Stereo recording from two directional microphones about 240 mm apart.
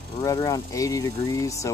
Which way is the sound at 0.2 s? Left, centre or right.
Centre.